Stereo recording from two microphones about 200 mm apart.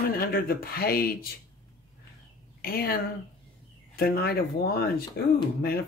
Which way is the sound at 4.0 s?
50° left (ahead or behind).